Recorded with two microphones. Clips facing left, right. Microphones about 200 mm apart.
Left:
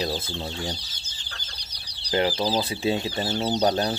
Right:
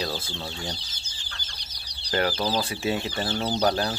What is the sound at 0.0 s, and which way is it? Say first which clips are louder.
Speech: left 3 dB; 20° left (ahead or behind).